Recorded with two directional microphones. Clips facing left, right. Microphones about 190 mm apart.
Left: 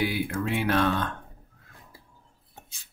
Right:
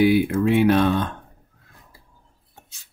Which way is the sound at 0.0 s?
20° right (ahead or behind).